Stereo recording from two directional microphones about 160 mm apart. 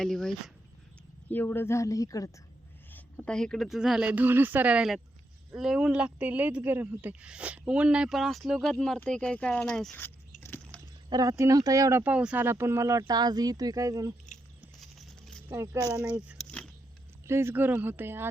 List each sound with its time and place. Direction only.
0.0 s speech: 5° left (ahead or behind); by 2.3 s 20° left (ahead or behind)
2.9 s speech: 10° left (ahead or behind)
10.4 s a sound: 15° left (ahead or behind)
11.1 s speech: 20° right (ahead or behind)
14.3 s patter: 50° left (ahead or behind)
14.8 s a sound: centre (ahead or behind)
15.4 s speech: 15° right (ahead or behind)
16.4 s a sound: 5° left (ahead or behind)
17.2 s speech: 15° right (ahead or behind)